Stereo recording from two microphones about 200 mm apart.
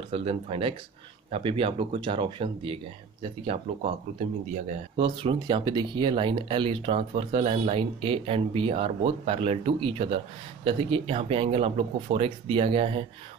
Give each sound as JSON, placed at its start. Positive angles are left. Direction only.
{"t": 0.1, "sound": "speech", "side_deg": -30}
{"t": 4.9, "sound": "speech", "side_deg": -25}